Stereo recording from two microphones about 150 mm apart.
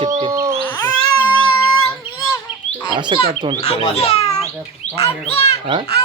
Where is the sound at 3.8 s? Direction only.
45° left (ahead or behind).